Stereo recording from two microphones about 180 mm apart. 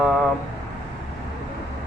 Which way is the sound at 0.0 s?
Centre (ahead or behind).